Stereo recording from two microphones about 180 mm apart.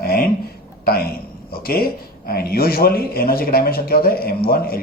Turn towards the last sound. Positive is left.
turn(degrees=55)  # may be behind; listen again after turning